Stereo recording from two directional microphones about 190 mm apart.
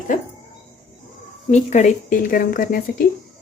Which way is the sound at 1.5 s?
40° left (ahead or behind).